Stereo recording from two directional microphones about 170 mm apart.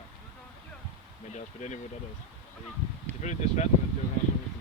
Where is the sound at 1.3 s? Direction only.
45° left (ahead or behind).